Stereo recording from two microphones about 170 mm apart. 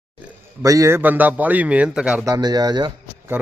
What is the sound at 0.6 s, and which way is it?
A man's voice, 20° right (ahead or behind).